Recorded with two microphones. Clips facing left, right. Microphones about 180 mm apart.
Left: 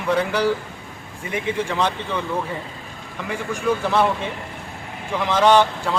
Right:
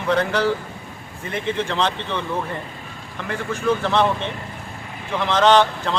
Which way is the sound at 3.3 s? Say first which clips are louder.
Right 1 dB; 10° left (ahead or behind).